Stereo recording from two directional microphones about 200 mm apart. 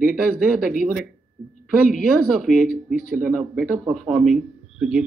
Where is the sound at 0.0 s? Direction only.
5° right (ahead or behind).